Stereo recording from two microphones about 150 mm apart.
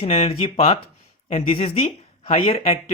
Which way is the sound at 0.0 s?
40° left (ahead or behind).